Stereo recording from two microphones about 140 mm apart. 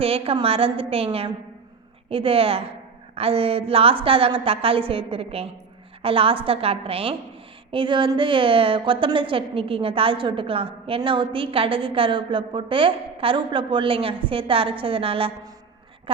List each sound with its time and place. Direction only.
0.0 s a woman's voice: 40° right (ahead or behind)